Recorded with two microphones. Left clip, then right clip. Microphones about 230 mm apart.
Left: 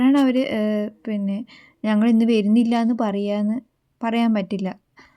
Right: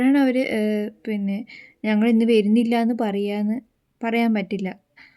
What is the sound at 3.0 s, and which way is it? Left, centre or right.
Speech, left.